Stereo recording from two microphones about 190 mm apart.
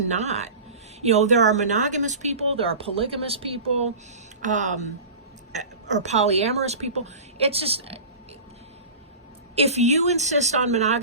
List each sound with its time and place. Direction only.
0.1 s speech: 35° right (ahead or behind)
9.6 s speech: 35° right (ahead or behind)